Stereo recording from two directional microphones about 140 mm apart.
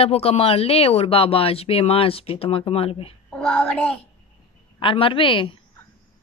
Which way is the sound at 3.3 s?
10° left (ahead or behind).